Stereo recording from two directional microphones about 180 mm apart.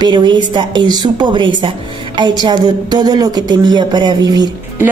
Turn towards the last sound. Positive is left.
turn(degrees=-20)  # may be behind; listen again after turning